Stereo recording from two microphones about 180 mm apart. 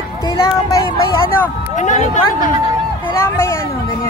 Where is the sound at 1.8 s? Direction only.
40° left (ahead or behind).